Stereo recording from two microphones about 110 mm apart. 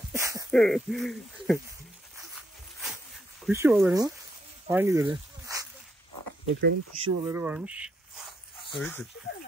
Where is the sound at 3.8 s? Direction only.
25° right (ahead or behind).